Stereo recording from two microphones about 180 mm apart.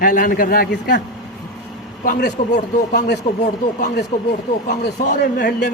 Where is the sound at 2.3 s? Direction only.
40° left (ahead or behind).